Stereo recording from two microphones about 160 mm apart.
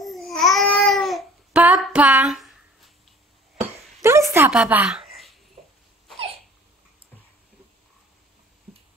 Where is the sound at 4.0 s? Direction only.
20° right (ahead or behind).